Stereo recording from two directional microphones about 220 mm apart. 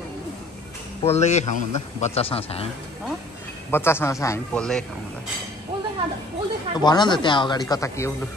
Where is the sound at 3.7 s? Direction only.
10° left (ahead or behind).